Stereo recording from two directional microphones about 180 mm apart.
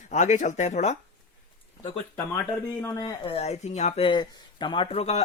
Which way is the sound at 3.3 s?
35° left (ahead or behind).